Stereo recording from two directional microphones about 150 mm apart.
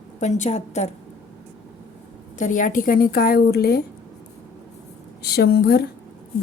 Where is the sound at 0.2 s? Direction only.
55° left (ahead or behind).